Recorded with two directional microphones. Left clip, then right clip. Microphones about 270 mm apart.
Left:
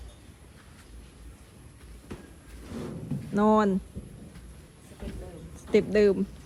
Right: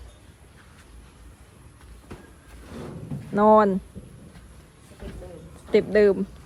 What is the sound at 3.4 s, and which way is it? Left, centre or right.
Speech, centre.